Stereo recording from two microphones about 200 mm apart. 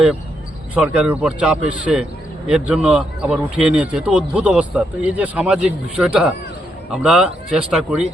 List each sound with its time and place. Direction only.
0.7 s a man's voice: 5° right (ahead or behind)